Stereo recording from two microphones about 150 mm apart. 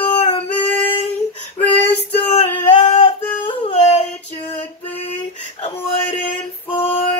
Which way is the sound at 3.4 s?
40° left (ahead or behind).